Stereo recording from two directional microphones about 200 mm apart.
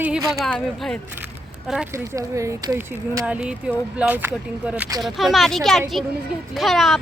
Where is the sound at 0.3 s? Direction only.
Centre (ahead or behind).